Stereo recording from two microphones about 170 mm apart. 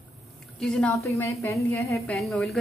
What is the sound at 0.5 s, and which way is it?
Speech, 5° left (ahead or behind).